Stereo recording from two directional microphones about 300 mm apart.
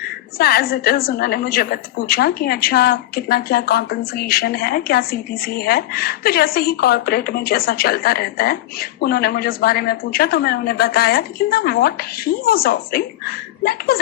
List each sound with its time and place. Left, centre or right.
0.3 s a woman's voice: left